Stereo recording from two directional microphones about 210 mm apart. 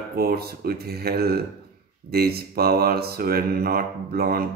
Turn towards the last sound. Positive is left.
turn(degrees=-45)  # may be behind; listen again after turning